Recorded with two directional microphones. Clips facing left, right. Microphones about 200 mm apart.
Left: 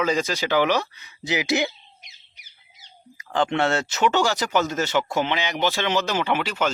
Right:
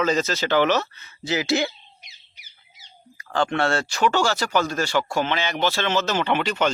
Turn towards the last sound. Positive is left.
turn(degrees=5)  # may be behind; listen again after turning